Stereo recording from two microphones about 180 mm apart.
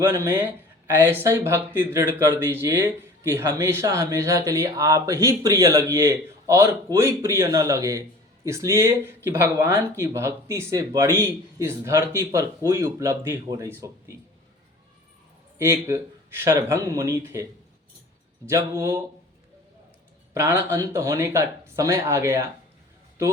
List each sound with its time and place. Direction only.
0.0 s speech: 15° right (ahead or behind)
15.5 s speech: 15° right (ahead or behind)
18.4 s speech: 15° right (ahead or behind)
20.3 s speech: 15° right (ahead or behind)